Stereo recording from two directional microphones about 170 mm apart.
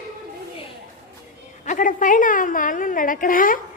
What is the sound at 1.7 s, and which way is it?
A woman's voice, 50° left (ahead or behind).